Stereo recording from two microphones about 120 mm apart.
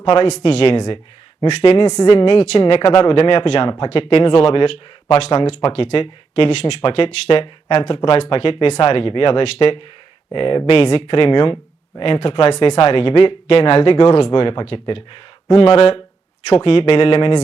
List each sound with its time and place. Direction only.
0.3 s speech: 65° left (ahead or behind)
1.4 s a woman's voice: 45° left (ahead or behind)
2.2 s speech: 60° left (ahead or behind)